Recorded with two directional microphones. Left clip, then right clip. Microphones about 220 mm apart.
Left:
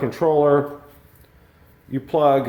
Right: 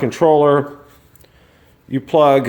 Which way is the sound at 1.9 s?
45° right (ahead or behind).